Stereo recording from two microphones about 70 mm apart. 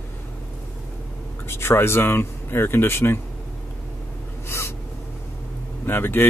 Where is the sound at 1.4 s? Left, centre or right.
Left.